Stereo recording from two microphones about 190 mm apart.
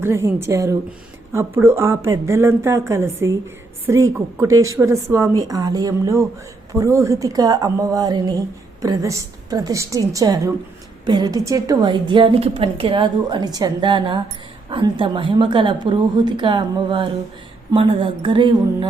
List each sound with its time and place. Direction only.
0.0 s a woman's voice: 15° right (ahead or behind)